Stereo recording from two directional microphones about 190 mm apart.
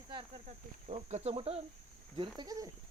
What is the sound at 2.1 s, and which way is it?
Speech, 25° right (ahead or behind).